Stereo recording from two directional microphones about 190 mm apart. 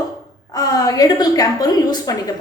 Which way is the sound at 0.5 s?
20° left (ahead or behind).